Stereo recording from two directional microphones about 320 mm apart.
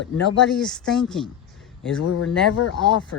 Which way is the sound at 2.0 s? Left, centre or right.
Left.